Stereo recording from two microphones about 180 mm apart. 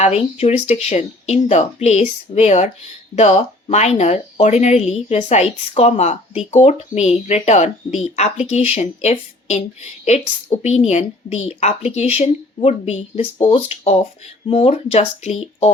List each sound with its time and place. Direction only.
0.0 s speech: 35° left (ahead or behind)